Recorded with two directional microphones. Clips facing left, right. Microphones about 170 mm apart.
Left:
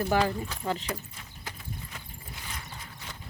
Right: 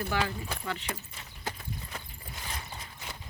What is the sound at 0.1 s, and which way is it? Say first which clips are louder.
Speech: left 5 dB; 35° left (ahead or behind).